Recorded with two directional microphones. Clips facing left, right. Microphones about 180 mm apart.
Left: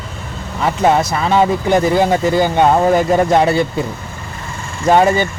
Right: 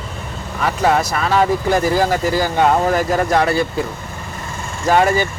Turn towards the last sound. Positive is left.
turn(degrees=20)  # may be behind; listen again after turning